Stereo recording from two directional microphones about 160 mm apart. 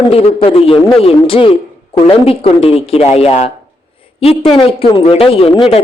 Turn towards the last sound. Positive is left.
turn(degrees=35)  # may be behind; listen again after turning